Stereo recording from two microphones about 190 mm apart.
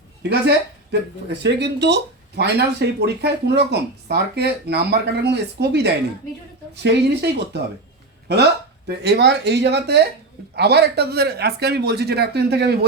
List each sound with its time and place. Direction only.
0.2 s speech: 60° right (ahead or behind)
8.9 s speech: 60° right (ahead or behind)